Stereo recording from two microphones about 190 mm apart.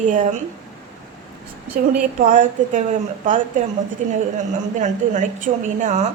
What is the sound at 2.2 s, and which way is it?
Speech, 45° right (ahead or behind).